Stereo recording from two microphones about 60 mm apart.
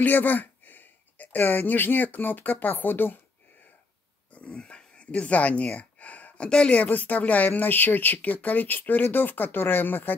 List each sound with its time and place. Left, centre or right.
0.0 s speech: left
4.3 s speech: left